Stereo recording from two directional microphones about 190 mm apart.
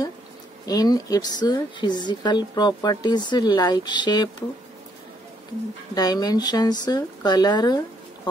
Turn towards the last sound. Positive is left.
turn(degrees=20)  # may be behind; listen again after turning